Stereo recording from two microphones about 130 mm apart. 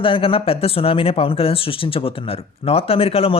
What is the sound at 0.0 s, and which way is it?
Speech, 45° left (ahead or behind).